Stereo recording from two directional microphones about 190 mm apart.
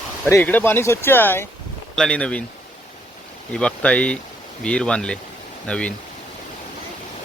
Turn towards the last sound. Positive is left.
turn(degrees=5)  # may be behind; listen again after turning